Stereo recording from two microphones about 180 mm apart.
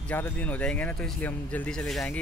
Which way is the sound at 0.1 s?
10° left (ahead or behind).